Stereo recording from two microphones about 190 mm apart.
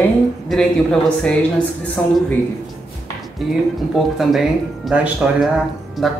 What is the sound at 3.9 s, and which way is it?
Speech, centre (ahead or behind).